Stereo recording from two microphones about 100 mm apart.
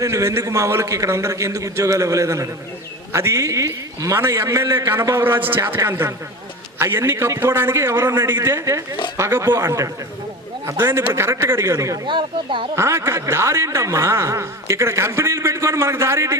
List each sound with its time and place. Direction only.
0.0 s a man's voice: 30° right (ahead or behind)
12.0 s speech: 55° right (ahead or behind)
12.7 s speech: 30° right (ahead or behind)